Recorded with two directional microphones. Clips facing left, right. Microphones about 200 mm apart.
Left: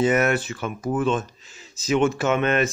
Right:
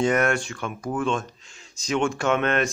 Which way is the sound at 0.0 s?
5° left (ahead or behind).